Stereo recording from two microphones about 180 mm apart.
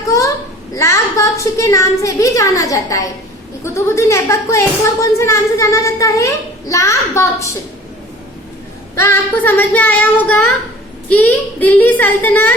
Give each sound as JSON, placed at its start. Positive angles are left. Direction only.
{"t": 0.1, "sound": "a sound", "side_deg": 15}
{"t": 3.6, "sound": "a child's voice", "side_deg": 15}
{"t": 9.0, "sound": "a child's voice", "side_deg": 10}